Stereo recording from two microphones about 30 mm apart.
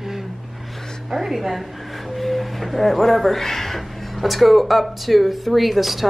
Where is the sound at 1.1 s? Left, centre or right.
Centre.